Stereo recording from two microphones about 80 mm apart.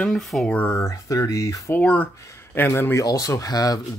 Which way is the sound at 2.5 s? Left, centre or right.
Left.